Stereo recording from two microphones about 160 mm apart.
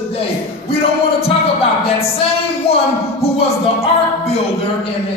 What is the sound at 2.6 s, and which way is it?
Music, 40° left (ahead or behind).